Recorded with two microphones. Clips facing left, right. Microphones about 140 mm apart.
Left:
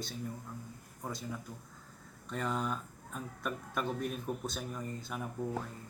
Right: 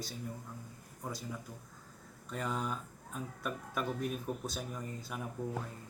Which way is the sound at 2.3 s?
5° right (ahead or behind).